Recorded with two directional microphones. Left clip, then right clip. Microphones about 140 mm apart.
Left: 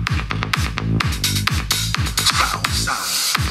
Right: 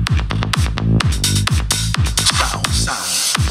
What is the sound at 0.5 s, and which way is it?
Music, 35° right (ahead or behind).